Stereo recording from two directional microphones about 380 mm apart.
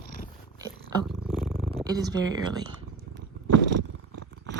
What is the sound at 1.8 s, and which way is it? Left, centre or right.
Speech, centre.